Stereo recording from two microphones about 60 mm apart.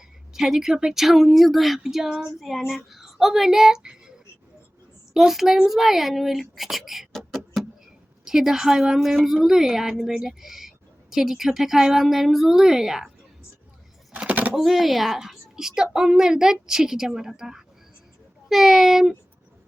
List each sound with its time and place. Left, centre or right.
0.3 s a woman's voice: centre
5.1 s a woman's voice: centre
14.2 s a sound: right
14.5 s a woman's voice: centre